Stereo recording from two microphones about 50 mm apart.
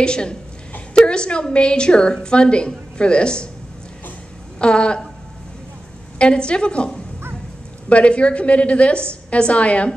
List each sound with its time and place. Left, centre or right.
0.0 s a woman's voice: centre
4.6 s a woman's voice: centre
6.1 s a woman's voice: centre